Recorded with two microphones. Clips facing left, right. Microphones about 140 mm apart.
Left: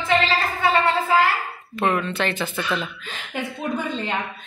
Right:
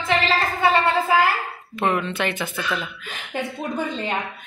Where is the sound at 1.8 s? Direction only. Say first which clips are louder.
Even; 15° right (ahead or behind).